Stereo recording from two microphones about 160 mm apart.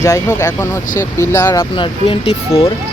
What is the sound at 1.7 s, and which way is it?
Speech, 35° left (ahead or behind).